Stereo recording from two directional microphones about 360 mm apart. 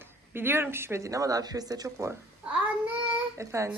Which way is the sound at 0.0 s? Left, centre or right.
Centre.